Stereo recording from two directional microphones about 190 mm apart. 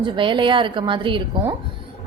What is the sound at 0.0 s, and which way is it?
A woman's voice, 25° right (ahead or behind).